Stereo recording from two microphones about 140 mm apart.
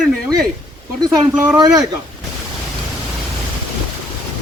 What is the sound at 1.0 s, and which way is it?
Speech, 25° right (ahead or behind).